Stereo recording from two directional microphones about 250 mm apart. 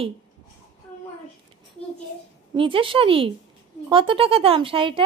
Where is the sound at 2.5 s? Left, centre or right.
Right.